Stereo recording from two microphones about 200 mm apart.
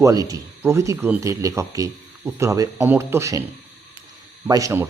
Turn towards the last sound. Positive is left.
turn(degrees=-15)  # may be behind; listen again after turning